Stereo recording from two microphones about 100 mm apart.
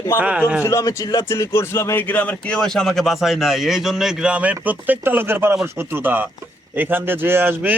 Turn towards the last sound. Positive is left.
turn(degrees=-20)  # may be behind; listen again after turning